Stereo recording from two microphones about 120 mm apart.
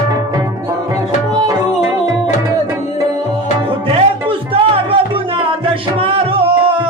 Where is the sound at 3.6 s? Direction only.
50° right (ahead or behind).